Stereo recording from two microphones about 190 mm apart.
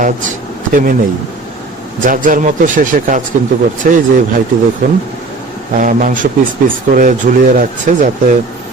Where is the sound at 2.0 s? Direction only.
45° right (ahead or behind).